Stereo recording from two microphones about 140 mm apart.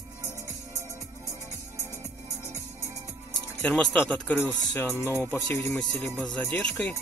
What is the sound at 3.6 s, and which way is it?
Speech, 5° left (ahead or behind).